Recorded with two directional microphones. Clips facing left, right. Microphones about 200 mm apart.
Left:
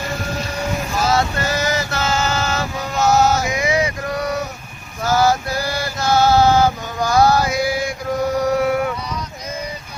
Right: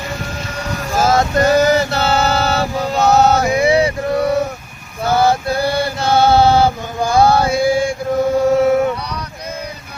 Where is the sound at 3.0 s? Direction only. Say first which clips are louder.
Right 3 dB; 60° right (ahead or behind).